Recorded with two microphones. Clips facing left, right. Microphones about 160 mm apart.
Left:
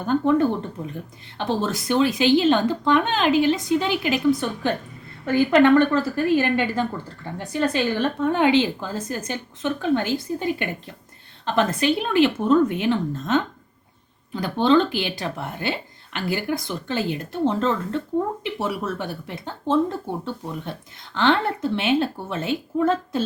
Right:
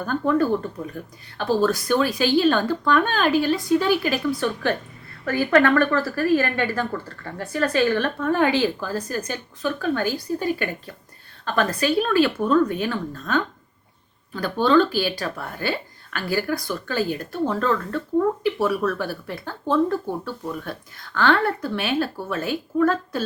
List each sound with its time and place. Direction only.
0.0 s speech: 20° left (ahead or behind)